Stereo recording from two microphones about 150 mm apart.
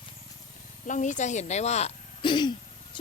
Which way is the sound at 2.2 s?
30° left (ahead or behind).